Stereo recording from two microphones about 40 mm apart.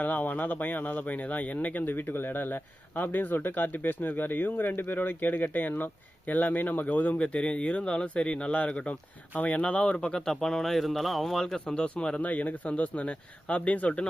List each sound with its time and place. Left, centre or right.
0.0 s speech: left
7.3 s speech: left
10.2 s speech: centre
12.2 s speech: left